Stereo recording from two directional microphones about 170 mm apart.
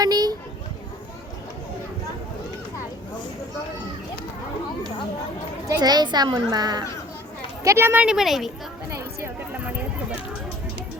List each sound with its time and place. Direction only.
0.0 s a child's voice: 25° right (ahead or behind)
5.6 s a child's voice: 25° right (ahead or behind); by 8.5 s centre (ahead or behind)
8.9 s chatter: 15° right (ahead or behind)